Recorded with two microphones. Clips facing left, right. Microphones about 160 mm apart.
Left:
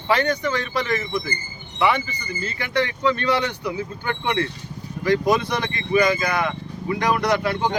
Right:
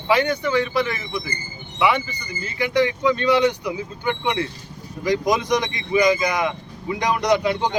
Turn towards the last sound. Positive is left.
turn(degrees=-15)  # may be behind; listen again after turning